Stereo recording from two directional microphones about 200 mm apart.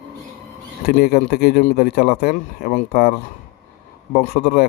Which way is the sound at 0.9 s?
50° left (ahead or behind).